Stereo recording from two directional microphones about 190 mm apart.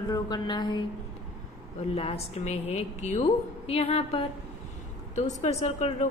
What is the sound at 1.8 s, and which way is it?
A woman's voice, 35° left (ahead or behind).